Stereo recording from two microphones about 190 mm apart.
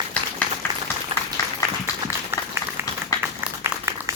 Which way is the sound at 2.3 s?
10° right (ahead or behind).